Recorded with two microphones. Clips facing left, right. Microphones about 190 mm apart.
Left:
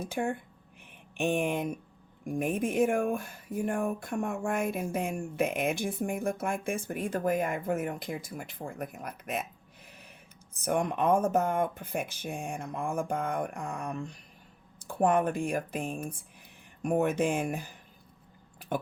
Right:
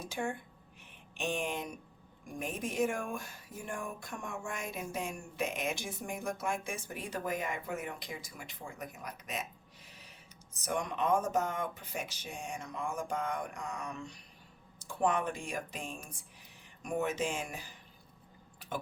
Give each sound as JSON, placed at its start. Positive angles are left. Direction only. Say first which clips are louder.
{"t": 0.0, "sound": "speech", "louder": "left 5 dB", "side_deg": 55}
{"t": 10.5, "sound": "speech", "louder": "left 7 dB", "side_deg": 55}